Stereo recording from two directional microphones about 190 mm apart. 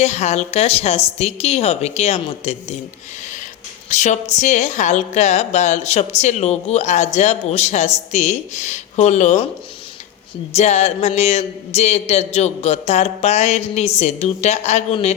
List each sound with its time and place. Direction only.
0.0 s speech: 35° left (ahead or behind)
3.8 s speech: 40° left (ahead or behind)
10.5 s speech: 35° left (ahead or behind)